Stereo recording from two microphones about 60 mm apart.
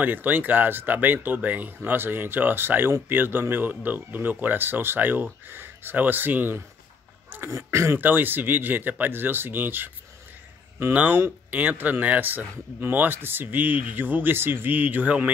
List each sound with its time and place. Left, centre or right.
0.0 s speech: right
7.4 s speech: right
8.0 s speech: right
10.9 s speech: right